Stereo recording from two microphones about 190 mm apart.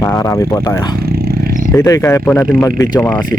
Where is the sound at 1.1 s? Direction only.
55° right (ahead or behind).